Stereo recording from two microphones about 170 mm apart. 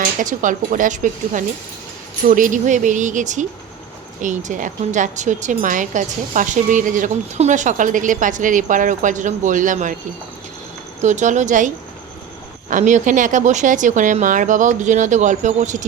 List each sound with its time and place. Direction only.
0.0 s speech: 50° right (ahead or behind)
11.0 s speech: 45° right (ahead or behind)
12.7 s speech: 45° right (ahead or behind)